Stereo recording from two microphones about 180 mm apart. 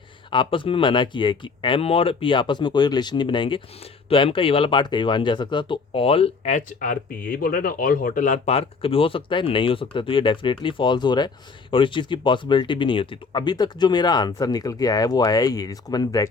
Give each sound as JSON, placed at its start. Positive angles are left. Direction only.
{"t": 0.3, "sound": "speech", "side_deg": 25}